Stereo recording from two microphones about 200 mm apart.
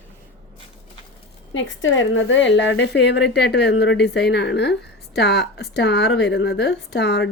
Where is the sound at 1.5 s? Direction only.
70° left (ahead or behind).